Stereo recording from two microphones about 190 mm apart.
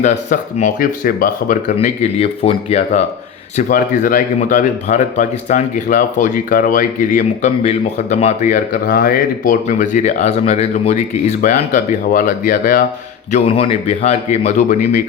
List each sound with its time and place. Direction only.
0.0 s speech: 40° left (ahead or behind)
3.6 s speech: 45° left (ahead or behind)
13.3 s speech: 30° left (ahead or behind)